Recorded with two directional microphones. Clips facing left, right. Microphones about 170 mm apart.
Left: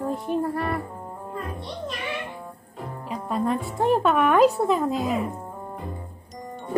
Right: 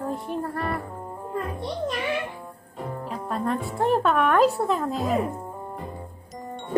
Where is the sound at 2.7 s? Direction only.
Centre (ahead or behind).